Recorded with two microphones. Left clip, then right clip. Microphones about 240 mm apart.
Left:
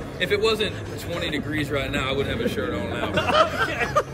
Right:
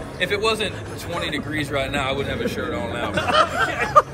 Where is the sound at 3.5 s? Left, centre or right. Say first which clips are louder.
Right 2 dB; centre.